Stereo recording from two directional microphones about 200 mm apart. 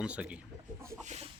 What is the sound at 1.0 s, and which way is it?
Chicken, 35° right (ahead or behind).